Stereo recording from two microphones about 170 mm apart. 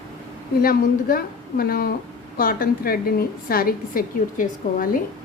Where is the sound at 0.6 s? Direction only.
60° left (ahead or behind).